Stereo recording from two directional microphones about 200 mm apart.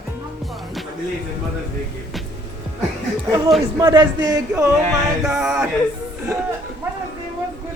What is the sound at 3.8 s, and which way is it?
Speech, 20° right (ahead or behind).